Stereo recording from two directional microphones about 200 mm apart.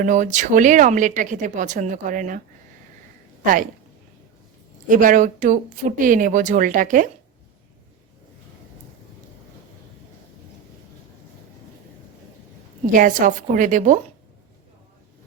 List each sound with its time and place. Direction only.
0.0 s speech: 40° right (ahead or behind)
3.4 s a woman's voice: 40° right (ahead or behind)
4.9 s speech: 40° right (ahead or behind)
12.8 s speech: 40° right (ahead or behind)